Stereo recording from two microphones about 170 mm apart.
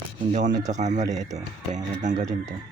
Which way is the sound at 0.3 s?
45° right (ahead or behind).